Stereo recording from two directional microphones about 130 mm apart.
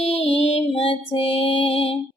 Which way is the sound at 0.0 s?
50° left (ahead or behind).